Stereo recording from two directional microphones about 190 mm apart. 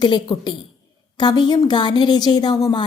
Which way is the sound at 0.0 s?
25° left (ahead or behind).